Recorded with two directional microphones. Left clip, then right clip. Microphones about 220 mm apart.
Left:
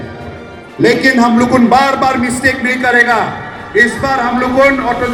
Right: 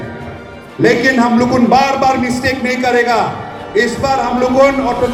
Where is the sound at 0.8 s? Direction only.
30° left (ahead or behind).